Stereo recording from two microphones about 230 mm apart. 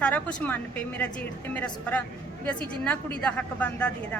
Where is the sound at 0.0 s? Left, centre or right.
Centre.